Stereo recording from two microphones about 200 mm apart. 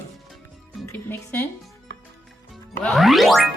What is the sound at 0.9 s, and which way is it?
Speech, 10° left (ahead or behind).